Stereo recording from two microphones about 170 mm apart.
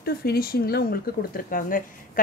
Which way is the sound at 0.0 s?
65° left (ahead or behind).